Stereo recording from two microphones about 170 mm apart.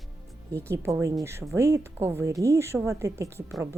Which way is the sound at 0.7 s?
15° right (ahead or behind).